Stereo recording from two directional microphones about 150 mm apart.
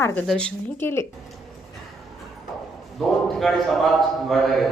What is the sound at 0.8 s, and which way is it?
Speech, 15° left (ahead or behind).